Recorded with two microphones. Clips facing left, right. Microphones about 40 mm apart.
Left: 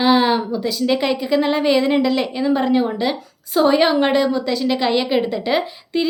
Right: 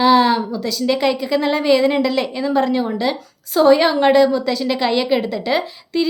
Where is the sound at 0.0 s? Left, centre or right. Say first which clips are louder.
Right 2 dB; centre.